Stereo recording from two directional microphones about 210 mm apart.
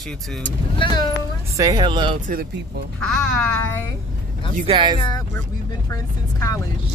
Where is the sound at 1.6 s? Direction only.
20° right (ahead or behind).